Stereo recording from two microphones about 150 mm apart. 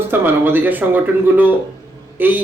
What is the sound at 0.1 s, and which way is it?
Speech, 10° right (ahead or behind).